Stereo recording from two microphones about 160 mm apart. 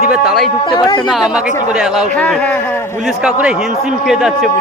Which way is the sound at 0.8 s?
25° left (ahead or behind).